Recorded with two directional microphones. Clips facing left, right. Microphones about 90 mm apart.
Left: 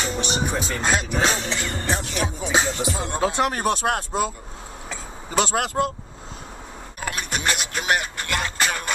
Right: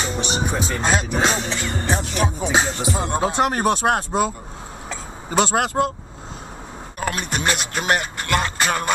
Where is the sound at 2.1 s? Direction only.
30° right (ahead or behind).